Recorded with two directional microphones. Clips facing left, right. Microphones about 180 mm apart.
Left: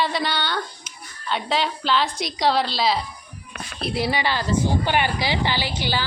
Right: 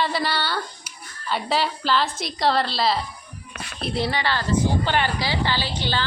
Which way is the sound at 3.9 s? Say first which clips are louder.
Left 1 dB; 10° left (ahead or behind).